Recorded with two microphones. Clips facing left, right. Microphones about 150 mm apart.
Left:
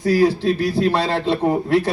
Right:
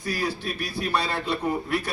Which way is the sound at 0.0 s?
90° left.